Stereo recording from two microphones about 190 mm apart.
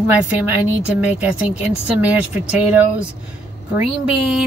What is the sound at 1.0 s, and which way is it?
Speech, 5° right (ahead or behind).